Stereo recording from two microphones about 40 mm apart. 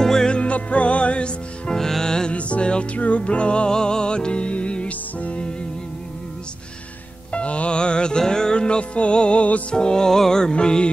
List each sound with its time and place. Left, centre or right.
0.0 s music: centre
0.3 s music: left
1.7 s music: centre
2.3 s music: left
7.3 s music: left
9.8 s music: centre